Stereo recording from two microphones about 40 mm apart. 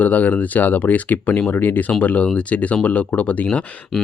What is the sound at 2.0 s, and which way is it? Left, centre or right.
Speech, left.